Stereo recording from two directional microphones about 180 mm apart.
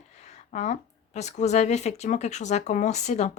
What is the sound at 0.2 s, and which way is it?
Speech, 40° left (ahead or behind).